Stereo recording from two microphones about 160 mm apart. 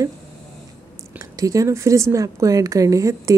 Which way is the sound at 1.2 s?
20° right (ahead or behind).